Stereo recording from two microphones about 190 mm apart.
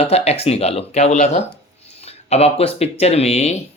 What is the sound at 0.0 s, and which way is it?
Speech, 30° left (ahead or behind).